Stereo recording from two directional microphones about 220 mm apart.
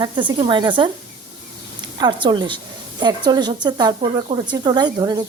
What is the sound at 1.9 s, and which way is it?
Speech, 20° right (ahead or behind).